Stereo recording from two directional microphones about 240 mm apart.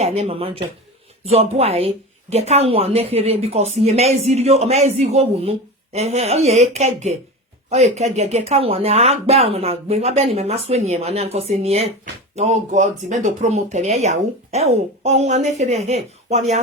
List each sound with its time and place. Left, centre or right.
0.0 s speech: right